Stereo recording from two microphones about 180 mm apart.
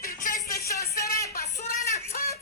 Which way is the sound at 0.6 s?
15° left (ahead or behind).